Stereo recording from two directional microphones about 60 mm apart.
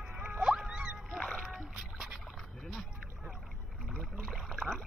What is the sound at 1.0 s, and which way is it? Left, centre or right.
Music, centre.